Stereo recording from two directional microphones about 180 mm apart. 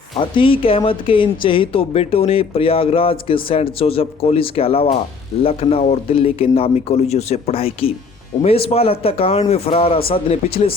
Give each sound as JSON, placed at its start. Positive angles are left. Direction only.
{"t": 0.2, "sound": "speech", "side_deg": 30}